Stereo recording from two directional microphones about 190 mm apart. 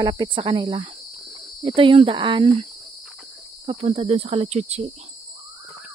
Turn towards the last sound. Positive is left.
turn(degrees=-35)  # may be behind; listen again after turning